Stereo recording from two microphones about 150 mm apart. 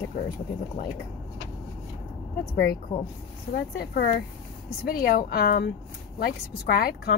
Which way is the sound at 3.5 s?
90° left.